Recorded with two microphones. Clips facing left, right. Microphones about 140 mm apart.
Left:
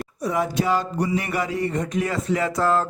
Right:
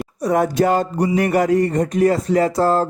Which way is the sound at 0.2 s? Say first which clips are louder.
Right 7 dB; 50° right (ahead or behind).